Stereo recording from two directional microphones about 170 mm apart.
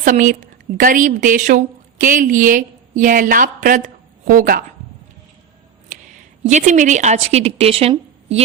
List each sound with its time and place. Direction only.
0.0 s a woman's voice: 50° right (ahead or behind)
6.4 s a woman's voice: 45° right (ahead or behind)